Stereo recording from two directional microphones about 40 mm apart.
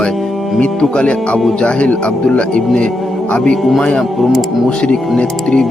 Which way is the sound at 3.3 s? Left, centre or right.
Left.